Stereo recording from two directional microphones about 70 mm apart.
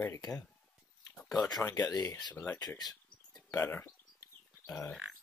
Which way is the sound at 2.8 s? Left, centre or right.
Left.